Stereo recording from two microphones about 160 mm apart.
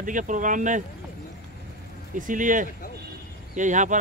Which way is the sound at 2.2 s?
55° right (ahead or behind).